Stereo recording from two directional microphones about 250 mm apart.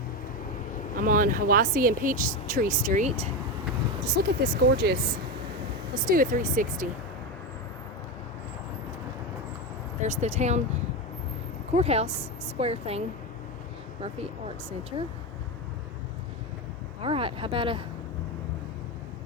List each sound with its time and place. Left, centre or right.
1.0 s speech: right
4.0 s speech: right
10.0 s speech: right
11.8 s speech: right
14.0 s speech: right
17.0 s speech: right